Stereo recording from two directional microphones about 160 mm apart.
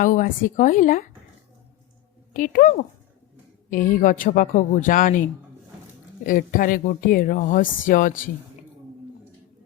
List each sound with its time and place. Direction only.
0.0 s speech: 55° left (ahead or behind)
2.3 s speech: 55° left (ahead or behind)
6.2 s speech: 60° left (ahead or behind)